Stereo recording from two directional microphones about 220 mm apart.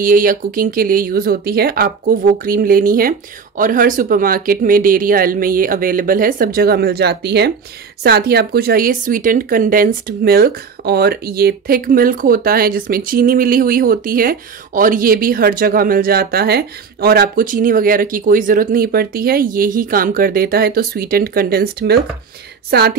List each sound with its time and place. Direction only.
0.0 s a woman's voice: 40° right (ahead or behind)